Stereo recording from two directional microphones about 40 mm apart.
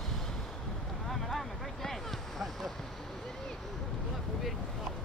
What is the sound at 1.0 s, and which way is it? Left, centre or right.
Boat, centre.